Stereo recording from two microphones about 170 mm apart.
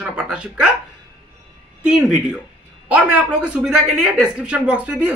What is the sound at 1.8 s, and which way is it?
Speech, 5° right (ahead or behind).